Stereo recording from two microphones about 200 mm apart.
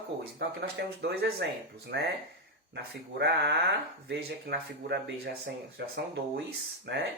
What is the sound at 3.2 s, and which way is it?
Speech, 55° right (ahead or behind).